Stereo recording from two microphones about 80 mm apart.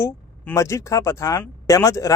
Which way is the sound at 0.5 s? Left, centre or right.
Left.